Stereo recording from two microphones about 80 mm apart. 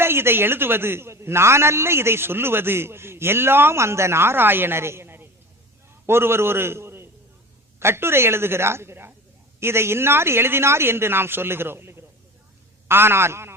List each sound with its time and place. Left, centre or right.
0.0 s a man's voice: right